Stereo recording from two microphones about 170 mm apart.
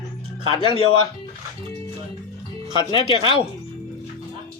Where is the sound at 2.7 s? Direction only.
30° left (ahead or behind).